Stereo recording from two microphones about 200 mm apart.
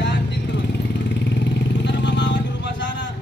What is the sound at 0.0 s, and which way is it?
Vehicle, 60° left (ahead or behind).